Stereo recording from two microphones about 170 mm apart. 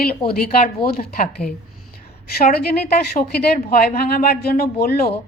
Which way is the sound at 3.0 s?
70° left (ahead or behind).